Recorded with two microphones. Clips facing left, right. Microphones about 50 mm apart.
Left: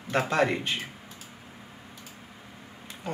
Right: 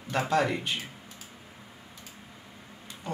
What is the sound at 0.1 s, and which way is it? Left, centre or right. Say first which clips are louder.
Speech: left 1 dB; left.